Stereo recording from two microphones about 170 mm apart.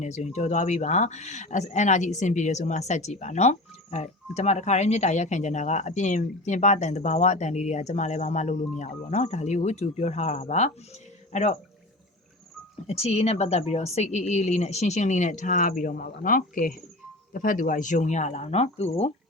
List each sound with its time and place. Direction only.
0.0 s speech: 45° left (ahead or behind)
12.9 s speech: 40° left (ahead or behind)